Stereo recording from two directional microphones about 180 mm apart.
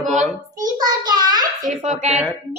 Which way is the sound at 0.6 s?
20° right (ahead or behind).